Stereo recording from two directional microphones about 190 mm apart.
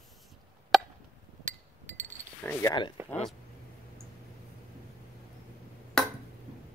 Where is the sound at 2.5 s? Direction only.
15° left (ahead or behind).